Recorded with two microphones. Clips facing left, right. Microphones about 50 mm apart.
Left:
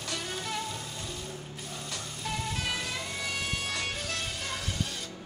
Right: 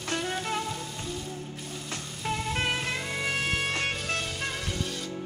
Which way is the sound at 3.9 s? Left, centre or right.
Centre.